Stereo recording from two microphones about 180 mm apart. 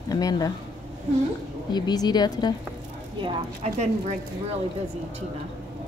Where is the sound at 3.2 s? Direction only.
40° right (ahead or behind).